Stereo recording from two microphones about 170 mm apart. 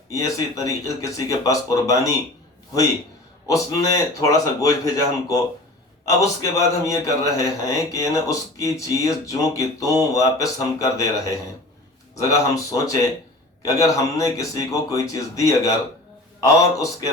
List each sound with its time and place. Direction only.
0.1 s a man's voice: 20° left (ahead or behind)
3.4 s a man's voice: 20° left (ahead or behind)